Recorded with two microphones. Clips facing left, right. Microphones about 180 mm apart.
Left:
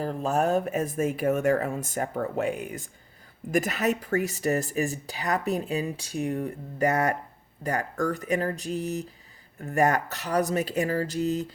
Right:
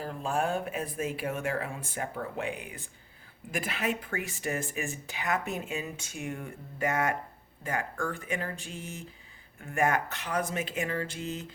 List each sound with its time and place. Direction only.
0.0 s speech: 40° left (ahead or behind)